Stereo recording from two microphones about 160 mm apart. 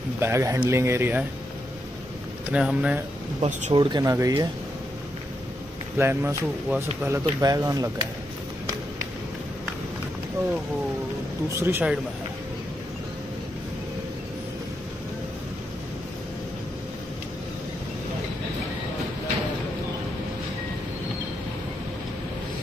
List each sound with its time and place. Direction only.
0.2 s speech: 15° right (ahead or behind)
2.5 s speech: 5° right (ahead or behind)
3.3 s speech: 50° right (ahead or behind)
3.7 s speech: 25° right (ahead or behind)
5.9 s speech: 15° right (ahead or behind)
11.6 s speech: 10° right (ahead or behind)